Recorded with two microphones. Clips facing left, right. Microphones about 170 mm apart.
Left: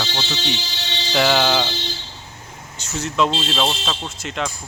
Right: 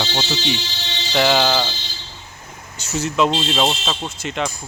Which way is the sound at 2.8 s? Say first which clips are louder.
Right 2 dB; 5° right (ahead or behind).